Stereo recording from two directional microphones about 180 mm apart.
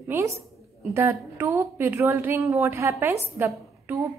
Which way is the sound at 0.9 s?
15° right (ahead or behind).